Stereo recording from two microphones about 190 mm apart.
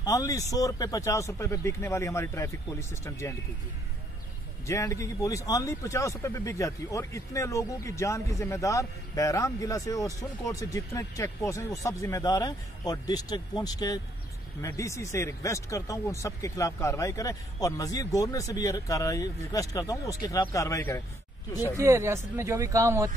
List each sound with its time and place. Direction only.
0.0 s speech: 20° left (ahead or behind)
4.6 s speech: 15° left (ahead or behind)
21.7 s speech: 15° right (ahead or behind)